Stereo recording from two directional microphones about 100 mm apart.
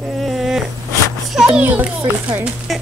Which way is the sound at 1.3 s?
5° right (ahead or behind).